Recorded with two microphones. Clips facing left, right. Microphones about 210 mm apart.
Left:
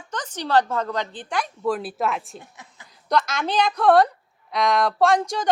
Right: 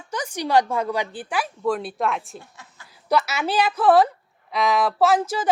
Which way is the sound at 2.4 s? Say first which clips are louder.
Left 1 dB; 15° left (ahead or behind).